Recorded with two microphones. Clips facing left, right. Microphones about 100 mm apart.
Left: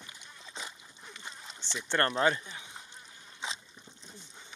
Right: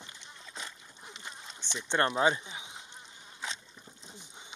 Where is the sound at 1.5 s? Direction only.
15° right (ahead or behind).